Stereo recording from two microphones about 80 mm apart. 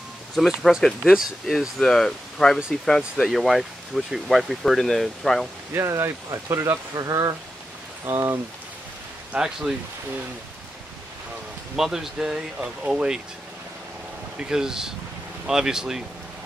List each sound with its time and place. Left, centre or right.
0.4 s speech: centre
5.7 s speech: right
6.9 s speech: right
9.3 s speech: centre
11.7 s speech: centre
14.4 s speech: centre